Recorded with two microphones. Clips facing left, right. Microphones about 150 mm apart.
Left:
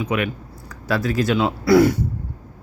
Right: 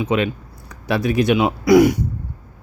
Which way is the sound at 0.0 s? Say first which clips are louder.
Right 3 dB; 25° right (ahead or behind).